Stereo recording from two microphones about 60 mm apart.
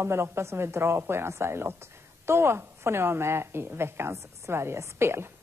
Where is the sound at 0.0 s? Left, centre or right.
Right.